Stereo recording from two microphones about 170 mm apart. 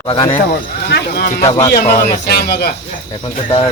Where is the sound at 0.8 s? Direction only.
70° left (ahead or behind).